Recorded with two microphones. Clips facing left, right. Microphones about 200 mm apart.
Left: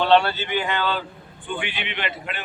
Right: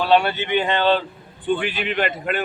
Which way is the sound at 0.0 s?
15° right (ahead or behind).